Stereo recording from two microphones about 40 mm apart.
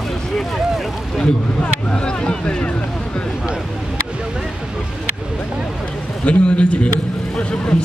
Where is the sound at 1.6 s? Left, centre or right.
Left.